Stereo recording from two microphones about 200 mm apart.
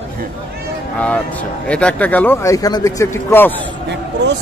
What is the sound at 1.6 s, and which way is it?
Speech, 5° left (ahead or behind).